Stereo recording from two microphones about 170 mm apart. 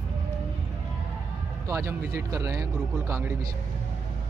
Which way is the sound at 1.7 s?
15° right (ahead or behind).